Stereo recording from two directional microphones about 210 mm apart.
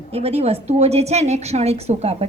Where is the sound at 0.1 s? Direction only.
30° right (ahead or behind).